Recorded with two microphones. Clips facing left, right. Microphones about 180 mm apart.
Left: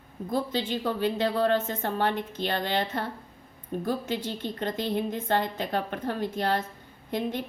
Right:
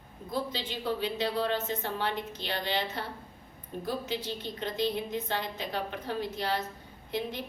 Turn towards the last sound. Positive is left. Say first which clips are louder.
# left 4 dB
turn(degrees=50)  # may be behind; listen again after turning